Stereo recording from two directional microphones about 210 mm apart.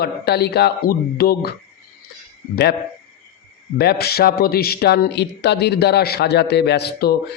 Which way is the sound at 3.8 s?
50° left (ahead or behind).